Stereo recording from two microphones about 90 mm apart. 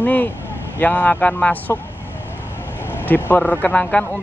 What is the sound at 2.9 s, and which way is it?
Speech, 25° left (ahead or behind).